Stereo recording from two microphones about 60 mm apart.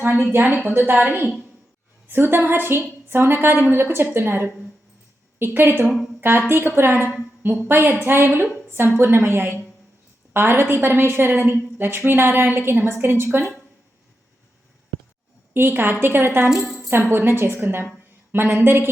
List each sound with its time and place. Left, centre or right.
0.0 s a woman's voice: right
15.5 s a woman's voice: right
16.6 s tambourine: centre
16.9 s a woman's voice: right